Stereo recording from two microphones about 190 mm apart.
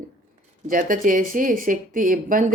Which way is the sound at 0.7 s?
45° right (ahead or behind).